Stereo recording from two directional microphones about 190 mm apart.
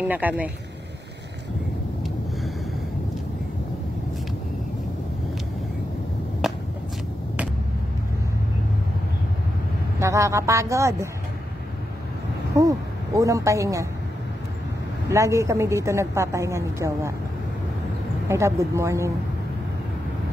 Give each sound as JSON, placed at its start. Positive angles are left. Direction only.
{"t": 0.0, "sound": "a woman's voice", "side_deg": -10}
{"t": 6.4, "sound": "a sound", "side_deg": 0}
{"t": 9.9, "sound": "a woman's voice", "side_deg": -15}
{"t": 12.5, "sound": "speech", "side_deg": -15}
{"t": 15.0, "sound": "a woman's voice", "side_deg": -15}
{"t": 18.3, "sound": "a woman's voice", "side_deg": -15}